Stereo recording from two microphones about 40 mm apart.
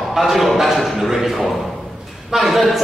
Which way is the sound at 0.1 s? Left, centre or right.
Centre.